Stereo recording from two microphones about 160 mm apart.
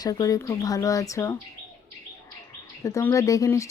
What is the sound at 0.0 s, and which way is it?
Speech, 25° left (ahead or behind).